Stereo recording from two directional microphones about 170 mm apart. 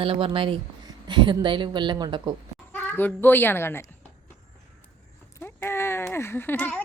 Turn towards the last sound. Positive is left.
turn(degrees=10)  # may be behind; listen again after turning